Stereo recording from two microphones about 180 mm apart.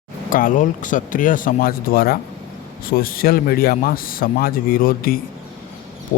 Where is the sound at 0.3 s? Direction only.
50° left (ahead or behind).